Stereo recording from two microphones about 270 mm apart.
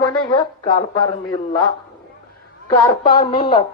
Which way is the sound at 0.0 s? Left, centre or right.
Centre.